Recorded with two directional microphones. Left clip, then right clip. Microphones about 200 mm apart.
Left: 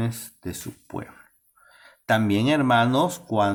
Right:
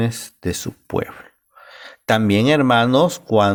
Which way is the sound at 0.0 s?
40° right (ahead or behind).